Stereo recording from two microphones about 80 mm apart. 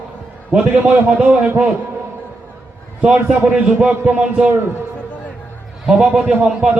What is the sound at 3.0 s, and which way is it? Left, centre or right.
A man's voice, centre.